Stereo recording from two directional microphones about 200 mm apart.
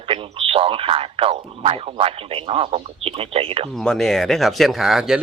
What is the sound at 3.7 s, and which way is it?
Speech, centre (ahead or behind).